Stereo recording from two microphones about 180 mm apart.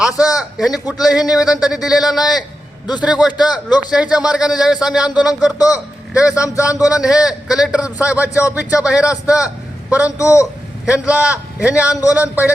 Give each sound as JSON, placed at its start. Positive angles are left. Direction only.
{"t": 0.0, "sound": "a man's voice", "side_deg": 0}
{"t": 3.3, "sound": "a man's voice", "side_deg": 25}
{"t": 3.9, "sound": "a man's voice", "side_deg": -5}
{"t": 6.3, "sound": "a man's voice", "side_deg": 15}
{"t": 6.7, "sound": "speech", "side_deg": -5}
{"t": 8.3, "sound": "a man's voice", "side_deg": 15}
{"t": 8.5, "sound": "speech", "side_deg": -5}
{"t": 10.0, "sound": "a man's voice", "side_deg": 15}
{"t": 10.8, "sound": "a man's voice", "side_deg": -5}